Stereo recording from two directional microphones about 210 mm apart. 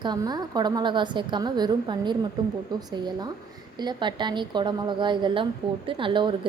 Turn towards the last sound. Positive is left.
turn(degrees=-25)  # may be behind; listen again after turning